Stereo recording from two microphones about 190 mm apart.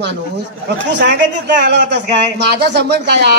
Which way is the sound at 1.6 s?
65° right (ahead or behind).